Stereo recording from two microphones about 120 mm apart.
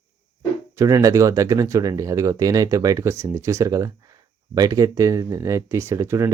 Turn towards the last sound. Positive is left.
turn(degrees=-25)  # may be behind; listen again after turning